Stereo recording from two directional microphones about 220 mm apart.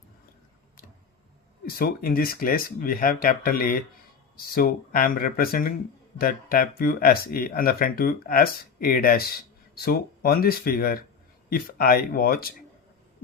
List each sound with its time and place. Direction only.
1.6 s speech: 40° left (ahead or behind)